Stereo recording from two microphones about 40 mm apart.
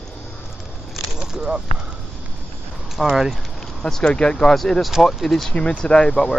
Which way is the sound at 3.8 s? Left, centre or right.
Centre.